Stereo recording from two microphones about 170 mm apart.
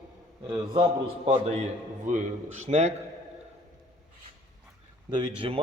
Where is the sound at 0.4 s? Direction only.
25° right (ahead or behind).